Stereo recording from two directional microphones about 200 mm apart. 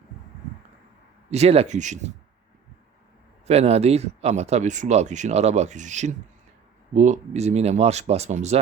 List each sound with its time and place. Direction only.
1.3 s speech: 30° right (ahead or behind)
3.4 s speech: 30° right (ahead or behind)